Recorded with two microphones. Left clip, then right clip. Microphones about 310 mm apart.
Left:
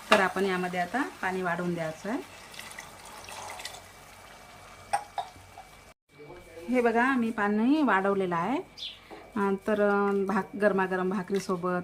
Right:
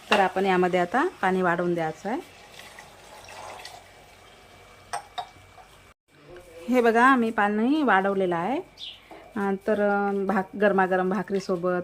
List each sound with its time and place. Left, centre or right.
0.2 s speech: centre
6.7 s speech: centre